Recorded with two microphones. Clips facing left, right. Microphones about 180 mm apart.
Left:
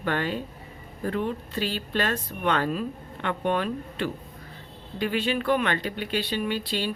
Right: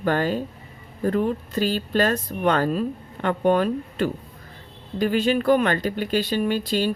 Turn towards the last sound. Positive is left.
turn(degrees=-45)  # may be behind; listen again after turning